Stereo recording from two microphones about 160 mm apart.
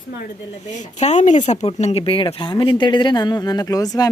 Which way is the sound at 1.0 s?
45° left (ahead or behind).